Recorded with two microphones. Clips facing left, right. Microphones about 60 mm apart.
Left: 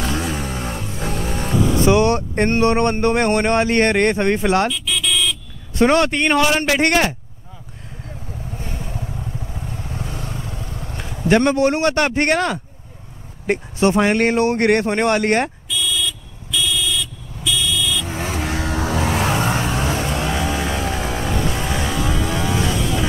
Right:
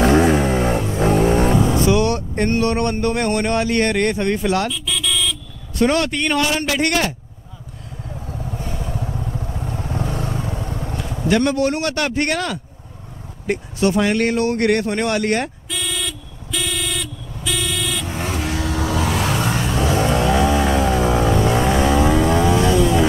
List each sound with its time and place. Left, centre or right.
0.0 s vehicle: right
1.9 s speech: left
5.8 s speech: left
8.6 s vehicle: left
8.9 s vehicle: centre
9.7 s vehicle: right
10.2 s vehicle: right
11.2 s speech: left
15.7 s vehicle: right
18.0 s vehicle: left
19.7 s vehicle: left
20.0 s vehicle: right